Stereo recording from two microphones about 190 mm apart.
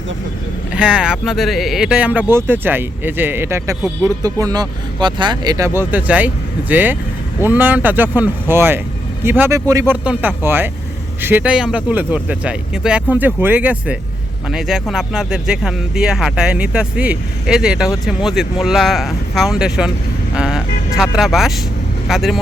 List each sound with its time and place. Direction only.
0.7 s speech: 5° right (ahead or behind)